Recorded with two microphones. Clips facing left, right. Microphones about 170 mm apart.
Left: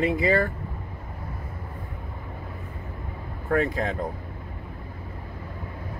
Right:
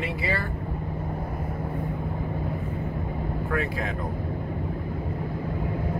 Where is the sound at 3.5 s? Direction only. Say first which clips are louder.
Left 7 dB; 35° left (ahead or behind).